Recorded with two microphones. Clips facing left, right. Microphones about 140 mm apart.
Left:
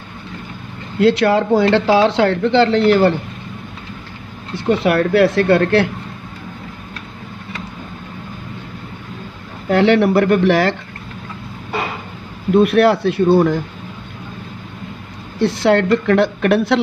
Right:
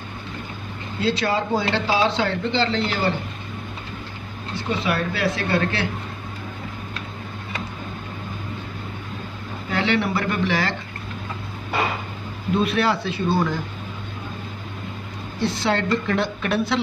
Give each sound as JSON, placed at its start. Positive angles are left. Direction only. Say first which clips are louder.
{"t": 1.0, "sound": "speech", "louder": "left 9 dB", "side_deg": 65}
{"t": 4.6, "sound": "speech", "louder": "left 9 dB", "side_deg": 60}
{"t": 9.7, "sound": "speech", "louder": "left 10 dB", "side_deg": 60}
{"t": 12.5, "sound": "speech", "louder": "left 9 dB", "side_deg": 60}
{"t": 15.3, "sound": "speech", "louder": "left 8 dB", "side_deg": 70}